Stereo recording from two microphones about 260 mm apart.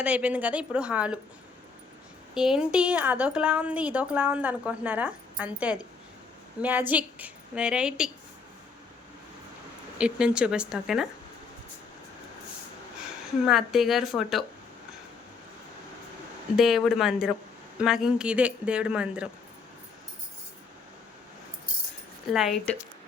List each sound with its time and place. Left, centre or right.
0.0 s a woman's voice: centre
2.3 s a woman's voice: centre
10.0 s a woman's voice: centre
13.4 s a woman's voice: centre
16.6 s a woman's voice: centre
22.3 s a woman's voice: centre